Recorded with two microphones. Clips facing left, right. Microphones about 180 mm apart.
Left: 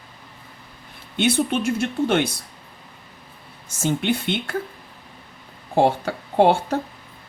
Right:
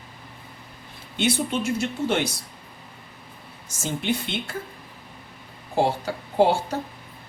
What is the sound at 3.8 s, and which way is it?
Speech, 60° left (ahead or behind).